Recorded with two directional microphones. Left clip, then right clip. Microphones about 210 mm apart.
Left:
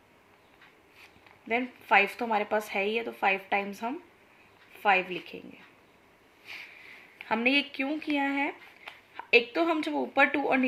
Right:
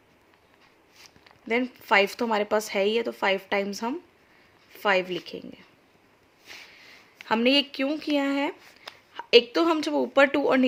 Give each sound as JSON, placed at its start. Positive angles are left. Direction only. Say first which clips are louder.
{"t": 1.5, "sound": "a woman's voice", "louder": "right 3 dB", "side_deg": -50}
{"t": 7.3, "sound": "a woman's voice", "louder": "right 4 dB", "side_deg": -55}